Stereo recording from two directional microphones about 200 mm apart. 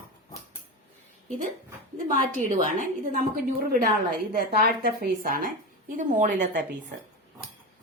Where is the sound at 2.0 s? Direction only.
40° right (ahead or behind).